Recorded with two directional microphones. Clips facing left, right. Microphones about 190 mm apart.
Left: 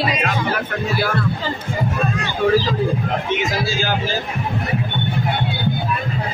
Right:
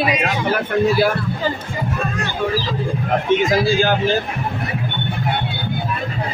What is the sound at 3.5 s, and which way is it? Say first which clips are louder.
Speech: right 6 dB; 55° right (ahead or behind).